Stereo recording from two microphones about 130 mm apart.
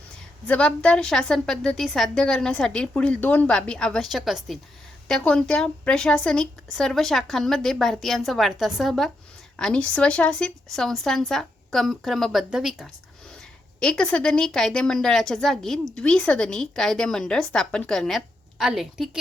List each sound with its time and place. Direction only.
0.4 s a woman's voice: 10° left (ahead or behind)